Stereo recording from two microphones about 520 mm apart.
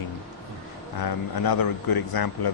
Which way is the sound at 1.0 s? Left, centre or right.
Left.